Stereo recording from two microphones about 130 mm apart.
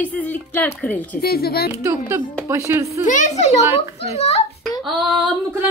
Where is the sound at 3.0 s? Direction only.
70° left (ahead or behind); by 4.4 s 55° left (ahead or behind).